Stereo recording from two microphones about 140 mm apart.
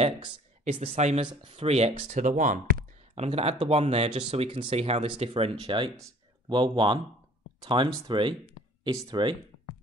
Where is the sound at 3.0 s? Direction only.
50° right (ahead or behind).